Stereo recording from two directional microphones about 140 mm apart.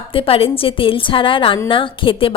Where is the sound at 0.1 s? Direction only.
40° left (ahead or behind).